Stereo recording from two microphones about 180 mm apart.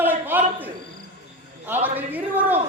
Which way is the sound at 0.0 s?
10° right (ahead or behind).